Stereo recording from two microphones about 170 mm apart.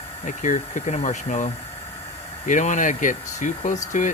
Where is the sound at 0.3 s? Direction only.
50° left (ahead or behind).